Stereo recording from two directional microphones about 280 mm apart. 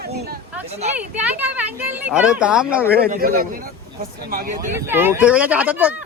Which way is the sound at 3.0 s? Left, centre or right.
Right.